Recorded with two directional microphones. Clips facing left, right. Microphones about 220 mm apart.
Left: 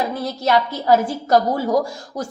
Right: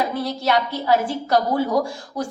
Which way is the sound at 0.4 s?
45° left (ahead or behind).